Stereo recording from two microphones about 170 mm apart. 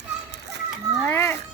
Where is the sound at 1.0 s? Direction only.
10° left (ahead or behind).